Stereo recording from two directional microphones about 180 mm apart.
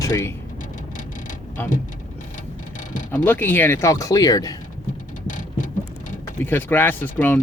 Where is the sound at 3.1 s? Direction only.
10° left (ahead or behind).